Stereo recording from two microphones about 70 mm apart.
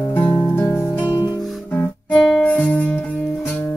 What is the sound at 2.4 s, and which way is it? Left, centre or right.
Music, left.